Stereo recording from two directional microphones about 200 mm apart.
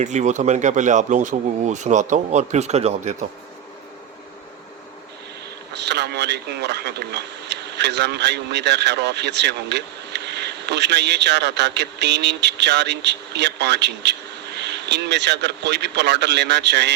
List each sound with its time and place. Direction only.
0.0 s speech: 35° right (ahead or behind)
5.7 s speech: 60° right (ahead or behind)